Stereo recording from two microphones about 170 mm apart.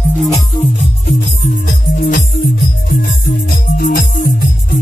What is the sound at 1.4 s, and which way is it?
Music, 80° left.